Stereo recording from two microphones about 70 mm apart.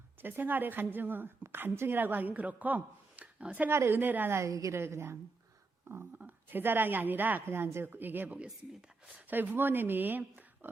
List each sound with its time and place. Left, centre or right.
0.2 s a woman's voice: right
3.7 s speech: right
4.4 s a woman's voice: right
4.8 s speech: right
6.2 s a woman's voice: right